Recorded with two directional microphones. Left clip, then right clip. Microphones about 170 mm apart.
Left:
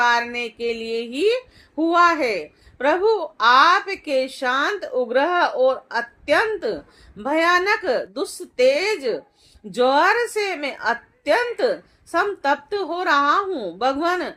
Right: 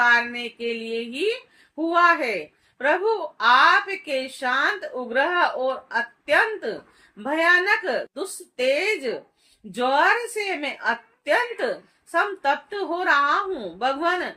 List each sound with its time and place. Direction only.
0.0 s a woman's voice: 45° left (ahead or behind)